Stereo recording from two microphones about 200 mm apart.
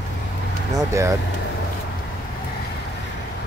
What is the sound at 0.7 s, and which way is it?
Speech, 15° right (ahead or behind).